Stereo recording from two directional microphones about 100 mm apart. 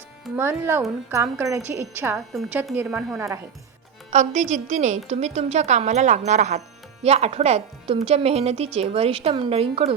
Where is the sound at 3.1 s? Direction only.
30° right (ahead or behind).